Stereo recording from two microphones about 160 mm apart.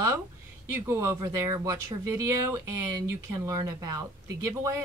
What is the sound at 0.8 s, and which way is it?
Speech, 15° right (ahead or behind).